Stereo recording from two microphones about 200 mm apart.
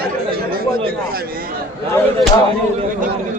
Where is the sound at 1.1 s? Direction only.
50° right (ahead or behind).